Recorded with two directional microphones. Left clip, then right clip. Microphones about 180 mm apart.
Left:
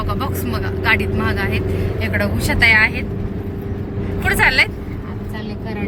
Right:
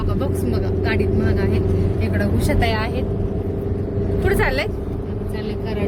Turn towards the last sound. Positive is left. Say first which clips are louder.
# left 6 dB
turn(degrees=-30)  # may be behind; listen again after turning